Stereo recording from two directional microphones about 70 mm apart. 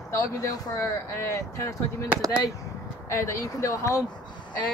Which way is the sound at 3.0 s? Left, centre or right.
Left.